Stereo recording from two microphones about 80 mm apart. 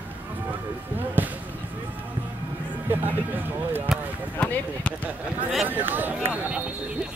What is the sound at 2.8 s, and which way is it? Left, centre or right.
Speech, right.